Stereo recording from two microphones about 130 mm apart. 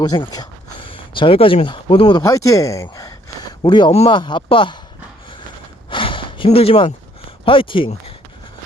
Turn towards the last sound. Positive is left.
turn(degrees=40)  # may be behind; listen again after turning